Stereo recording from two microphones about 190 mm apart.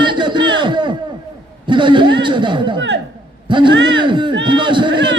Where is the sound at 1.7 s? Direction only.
25° right (ahead or behind).